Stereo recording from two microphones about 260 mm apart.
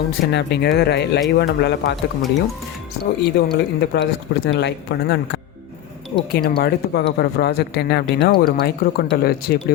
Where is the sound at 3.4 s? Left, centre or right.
Left.